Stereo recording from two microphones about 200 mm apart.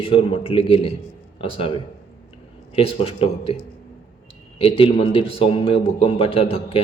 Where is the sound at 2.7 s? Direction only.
30° left (ahead or behind).